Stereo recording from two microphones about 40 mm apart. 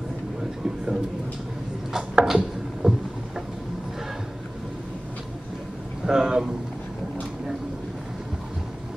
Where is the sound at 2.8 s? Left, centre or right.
Centre.